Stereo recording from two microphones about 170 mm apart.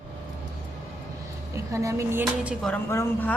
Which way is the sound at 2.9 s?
15° left (ahead or behind).